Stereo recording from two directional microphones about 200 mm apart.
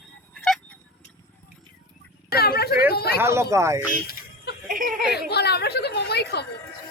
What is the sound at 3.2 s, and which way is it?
Speech, 15° right (ahead or behind).